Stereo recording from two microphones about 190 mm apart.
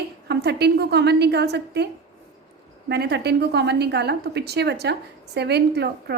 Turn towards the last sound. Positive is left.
turn(degrees=-60)  # may be behind; listen again after turning